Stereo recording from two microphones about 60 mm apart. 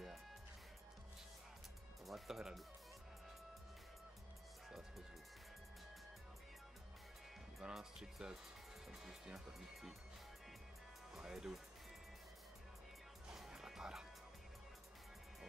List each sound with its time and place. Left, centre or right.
2.0 s music: centre
4.6 s music: centre
7.6 s music: centre
8.9 s speech: centre
11.1 s speech: centre
13.3 s music: centre